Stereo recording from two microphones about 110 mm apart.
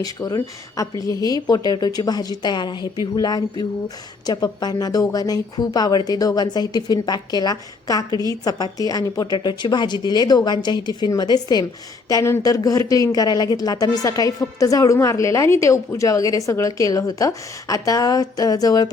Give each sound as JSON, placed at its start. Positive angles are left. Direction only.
{"t": 0.0, "sound": "speech", "side_deg": 35}
{"t": 12.0, "sound": "speech", "side_deg": 25}